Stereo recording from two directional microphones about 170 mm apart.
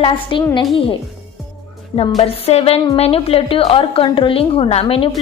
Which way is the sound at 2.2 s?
40° left (ahead or behind).